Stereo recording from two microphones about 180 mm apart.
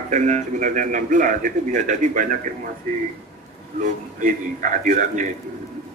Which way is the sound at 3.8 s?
50° right (ahead or behind).